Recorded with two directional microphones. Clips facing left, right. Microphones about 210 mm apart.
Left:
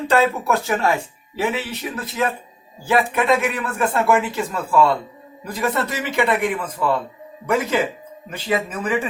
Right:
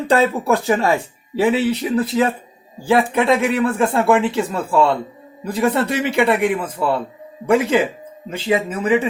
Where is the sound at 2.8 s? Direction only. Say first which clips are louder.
Right 3 dB; 30° right (ahead or behind).